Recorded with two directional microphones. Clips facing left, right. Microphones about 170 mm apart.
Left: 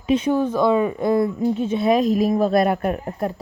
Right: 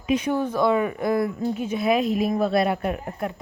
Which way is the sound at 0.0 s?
25° left (ahead or behind).